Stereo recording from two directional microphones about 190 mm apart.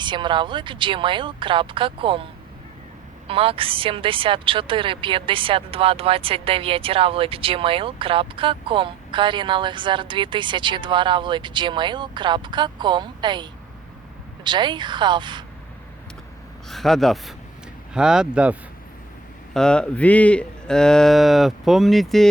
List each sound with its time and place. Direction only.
0.0 s speech: 25° right (ahead or behind)
3.2 s speech: 30° right (ahead or behind)
16.6 s a man's voice: centre (ahead or behind)
19.5 s a man's voice: 5° left (ahead or behind)